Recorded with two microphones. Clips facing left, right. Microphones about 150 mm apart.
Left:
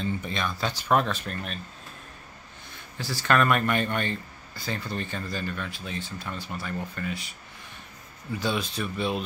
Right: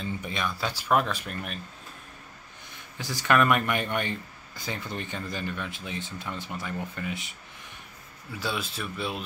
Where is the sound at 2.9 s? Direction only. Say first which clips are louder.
Even; 15° right (ahead or behind).